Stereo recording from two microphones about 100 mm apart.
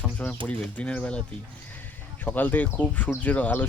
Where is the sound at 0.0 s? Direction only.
10° left (ahead or behind).